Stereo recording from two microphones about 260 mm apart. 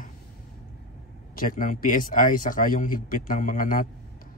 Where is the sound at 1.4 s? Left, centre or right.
Left.